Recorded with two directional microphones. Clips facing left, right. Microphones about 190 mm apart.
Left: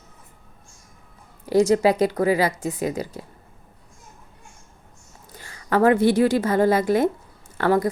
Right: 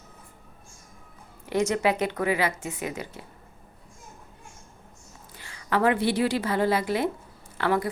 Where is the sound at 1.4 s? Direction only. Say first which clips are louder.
Left 7 dB; 35° left (ahead or behind).